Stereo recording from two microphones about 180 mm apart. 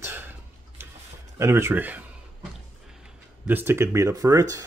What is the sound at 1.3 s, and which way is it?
Speech, 15° right (ahead or behind).